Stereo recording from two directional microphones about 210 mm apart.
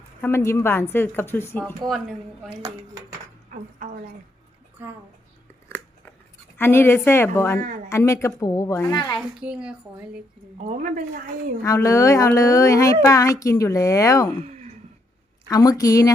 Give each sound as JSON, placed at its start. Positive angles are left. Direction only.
{"t": 0.2, "sound": "a woman's voice", "side_deg": 10}
{"t": 3.5, "sound": "a woman's voice", "side_deg": -40}
{"t": 4.8, "sound": "a woman's voice", "side_deg": -10}
{"t": 6.6, "sound": "a woman's voice", "side_deg": 10}
{"t": 9.1, "sound": "a woman's voice", "side_deg": -5}
{"t": 10.6, "sound": "a woman's voice", "side_deg": -35}
{"t": 11.6, "sound": "a woman's voice", "side_deg": 15}
{"t": 14.4, "sound": "sigh", "side_deg": -35}
{"t": 15.4, "sound": "a woman's voice", "side_deg": 15}